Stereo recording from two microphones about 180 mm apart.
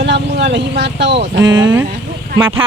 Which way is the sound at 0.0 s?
75° right (ahead or behind).